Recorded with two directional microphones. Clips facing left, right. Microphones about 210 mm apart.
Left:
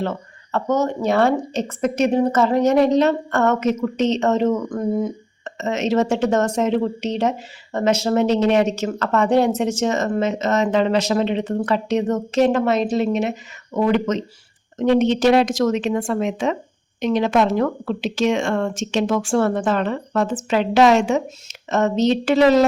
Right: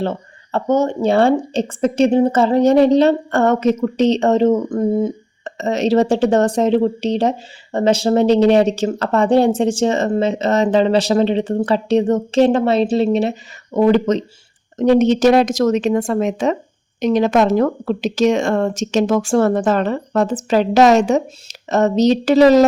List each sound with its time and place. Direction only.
0.0 s speech: 30° right (ahead or behind)